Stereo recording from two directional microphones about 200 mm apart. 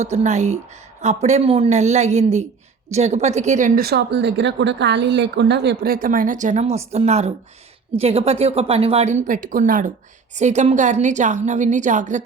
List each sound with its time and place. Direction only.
0.0 s a woman's voice: 35° right (ahead or behind)